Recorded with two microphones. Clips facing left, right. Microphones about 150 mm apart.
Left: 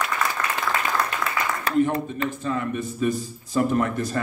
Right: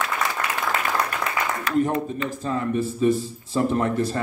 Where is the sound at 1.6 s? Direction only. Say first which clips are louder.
Left 1 dB; 35° left (ahead or behind).